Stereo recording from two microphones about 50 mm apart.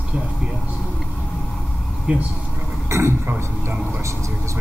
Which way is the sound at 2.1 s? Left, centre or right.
Right.